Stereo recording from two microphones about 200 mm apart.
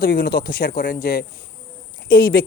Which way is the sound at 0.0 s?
45° left (ahead or behind).